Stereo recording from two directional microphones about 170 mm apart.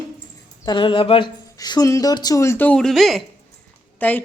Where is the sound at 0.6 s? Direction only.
25° left (ahead or behind); by 3.2 s centre (ahead or behind).